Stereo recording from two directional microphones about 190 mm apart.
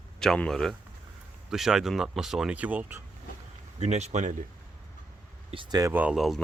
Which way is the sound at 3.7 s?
35° right (ahead or behind).